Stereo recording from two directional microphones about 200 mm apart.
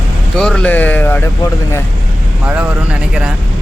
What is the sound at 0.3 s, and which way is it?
Speech, 5° left (ahead or behind).